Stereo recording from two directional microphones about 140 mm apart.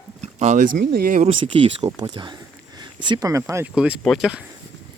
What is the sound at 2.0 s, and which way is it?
Speech, 35° right (ahead or behind).